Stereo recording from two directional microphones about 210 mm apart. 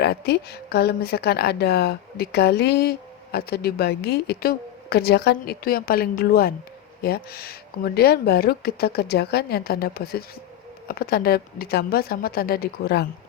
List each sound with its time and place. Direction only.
0.0 s speech: 50° left (ahead or behind)